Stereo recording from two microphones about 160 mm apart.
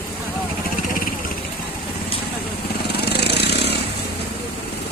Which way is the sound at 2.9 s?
90° left.